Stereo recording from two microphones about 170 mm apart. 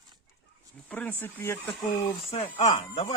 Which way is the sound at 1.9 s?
40° left (ahead or behind).